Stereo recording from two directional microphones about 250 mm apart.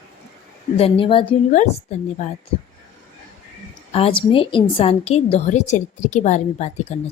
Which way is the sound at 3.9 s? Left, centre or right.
Left.